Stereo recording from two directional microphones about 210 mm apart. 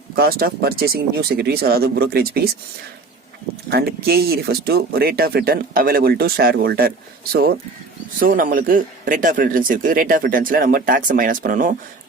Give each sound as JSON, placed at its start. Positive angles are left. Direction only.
{"t": 0.2, "sound": "speech", "side_deg": -45}
{"t": 3.7, "sound": "a man's voice", "side_deg": -50}